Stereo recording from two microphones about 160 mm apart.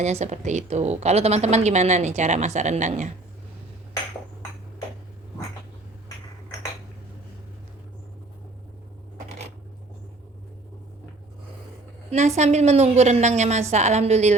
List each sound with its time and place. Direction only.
0.0 s a woman's voice: 45° right (ahead or behind)
12.4 s a woman's voice: 45° right (ahead or behind)